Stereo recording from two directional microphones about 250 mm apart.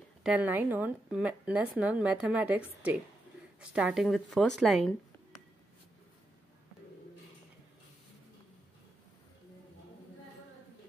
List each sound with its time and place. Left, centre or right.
0.2 s speech: centre
3.7 s speech: centre